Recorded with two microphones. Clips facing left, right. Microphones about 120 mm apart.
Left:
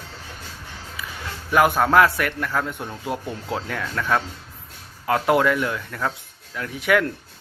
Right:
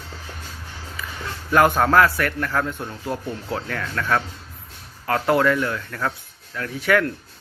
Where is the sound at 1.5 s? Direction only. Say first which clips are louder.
Even; 10° left (ahead or behind).